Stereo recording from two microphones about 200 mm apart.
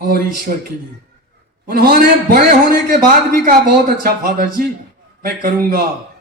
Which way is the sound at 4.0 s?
50° right (ahead or behind).